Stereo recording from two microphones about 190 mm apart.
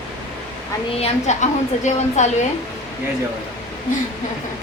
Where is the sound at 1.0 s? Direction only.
35° left (ahead or behind).